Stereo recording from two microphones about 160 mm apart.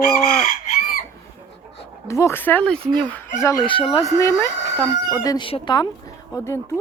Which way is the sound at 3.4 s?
20° left (ahead or behind).